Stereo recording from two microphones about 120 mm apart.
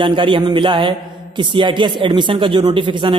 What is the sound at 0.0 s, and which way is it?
A man's voice, 45° right (ahead or behind).